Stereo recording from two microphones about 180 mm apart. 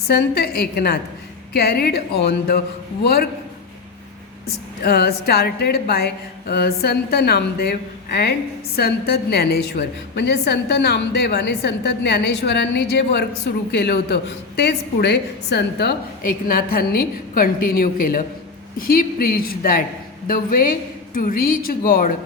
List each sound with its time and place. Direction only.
0.1 s a woman's voice: 60° left (ahead or behind)
4.8 s a woman's voice: 60° left (ahead or behind)